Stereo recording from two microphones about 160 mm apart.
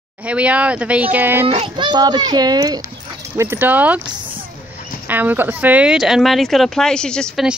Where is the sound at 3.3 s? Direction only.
10° right (ahead or behind).